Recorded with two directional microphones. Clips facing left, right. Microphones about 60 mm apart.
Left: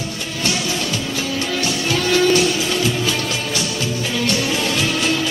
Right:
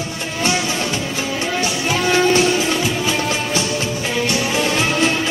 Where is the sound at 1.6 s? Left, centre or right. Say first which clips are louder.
Right 1 dB; right.